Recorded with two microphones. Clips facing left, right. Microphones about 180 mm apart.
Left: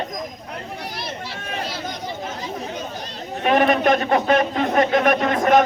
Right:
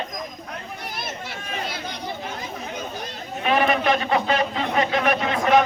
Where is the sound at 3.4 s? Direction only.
45° left (ahead or behind).